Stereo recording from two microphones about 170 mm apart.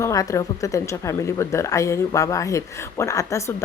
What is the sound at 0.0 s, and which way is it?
A woman's voice, 20° left (ahead or behind).